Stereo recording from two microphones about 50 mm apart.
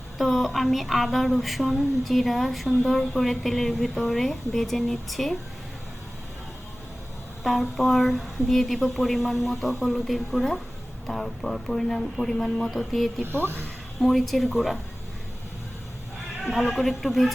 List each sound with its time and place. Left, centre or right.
0.2 s a woman's voice: centre
7.4 s a woman's voice: centre
13.2 s speech: right
14.0 s a woman's voice: centre
16.5 s a woman's voice: centre